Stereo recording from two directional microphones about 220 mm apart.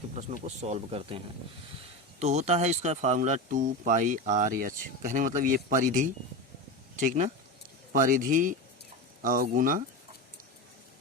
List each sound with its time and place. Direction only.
0.1 s speech: 30° right (ahead or behind)